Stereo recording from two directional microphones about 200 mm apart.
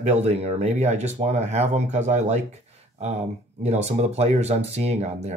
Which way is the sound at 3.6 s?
35° right (ahead or behind).